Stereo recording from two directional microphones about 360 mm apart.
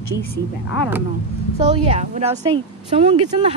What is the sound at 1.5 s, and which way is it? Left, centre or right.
A woman's voice, centre.